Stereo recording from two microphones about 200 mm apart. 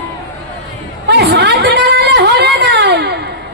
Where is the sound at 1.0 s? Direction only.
55° right (ahead or behind).